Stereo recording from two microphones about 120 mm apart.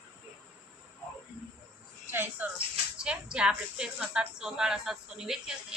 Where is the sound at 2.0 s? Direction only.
15° right (ahead or behind).